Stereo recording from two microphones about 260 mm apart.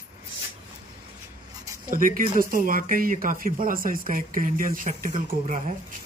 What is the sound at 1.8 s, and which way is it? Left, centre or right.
Speech, right.